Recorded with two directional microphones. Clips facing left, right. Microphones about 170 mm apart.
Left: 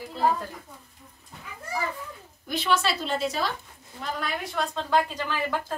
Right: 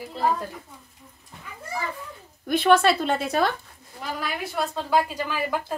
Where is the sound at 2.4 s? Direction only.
55° right (ahead or behind).